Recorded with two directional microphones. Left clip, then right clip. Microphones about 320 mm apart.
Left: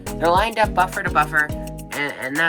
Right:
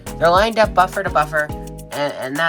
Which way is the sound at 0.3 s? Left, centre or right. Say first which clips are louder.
Right 4 dB; centre.